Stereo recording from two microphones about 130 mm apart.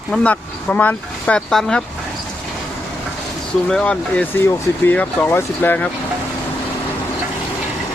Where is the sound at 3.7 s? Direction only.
10° left (ahead or behind).